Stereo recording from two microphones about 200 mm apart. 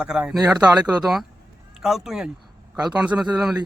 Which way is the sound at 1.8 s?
Centre (ahead or behind).